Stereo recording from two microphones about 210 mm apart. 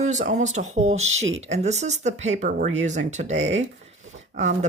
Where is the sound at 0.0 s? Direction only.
35° right (ahead or behind).